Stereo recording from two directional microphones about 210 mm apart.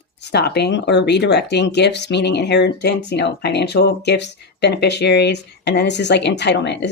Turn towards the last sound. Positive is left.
turn(degrees=55)  # may be behind; listen again after turning